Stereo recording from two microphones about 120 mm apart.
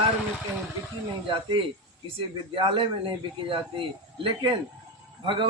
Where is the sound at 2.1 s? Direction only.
45° right (ahead or behind).